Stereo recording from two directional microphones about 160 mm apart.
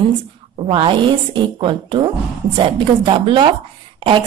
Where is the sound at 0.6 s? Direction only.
35° right (ahead or behind).